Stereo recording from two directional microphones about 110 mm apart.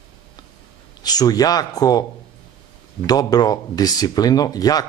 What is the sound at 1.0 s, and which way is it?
Speech, 35° left (ahead or behind).